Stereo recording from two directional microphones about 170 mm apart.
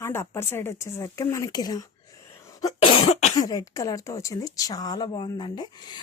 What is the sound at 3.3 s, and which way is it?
A woman's voice, 20° left (ahead or behind).